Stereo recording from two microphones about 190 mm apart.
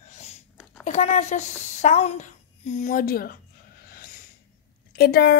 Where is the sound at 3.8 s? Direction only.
50° left (ahead or behind).